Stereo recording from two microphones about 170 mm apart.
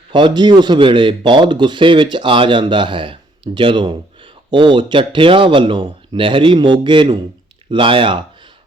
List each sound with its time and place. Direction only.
0.1 s speech: 25° right (ahead or behind)